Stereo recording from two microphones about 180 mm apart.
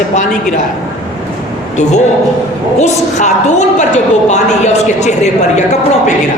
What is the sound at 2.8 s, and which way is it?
Speech, 40° left (ahead or behind).